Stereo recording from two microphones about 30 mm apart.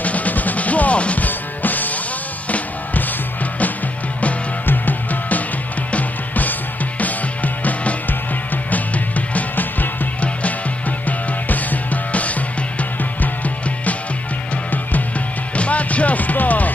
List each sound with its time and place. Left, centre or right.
0.0 s music: left
1.2 s music: left
4.6 s music: left
7.0 s music: left
11.1 s music: left
14.7 s music: left
15.5 s music: left